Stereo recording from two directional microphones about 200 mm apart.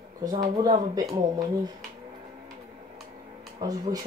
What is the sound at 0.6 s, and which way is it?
Speech, 20° right (ahead or behind).